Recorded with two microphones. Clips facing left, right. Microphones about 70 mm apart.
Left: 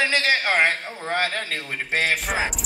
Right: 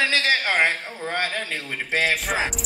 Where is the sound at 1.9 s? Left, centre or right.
Left.